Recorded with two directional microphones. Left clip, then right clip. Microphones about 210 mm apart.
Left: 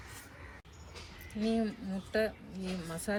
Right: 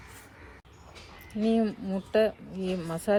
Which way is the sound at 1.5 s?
30° right (ahead or behind).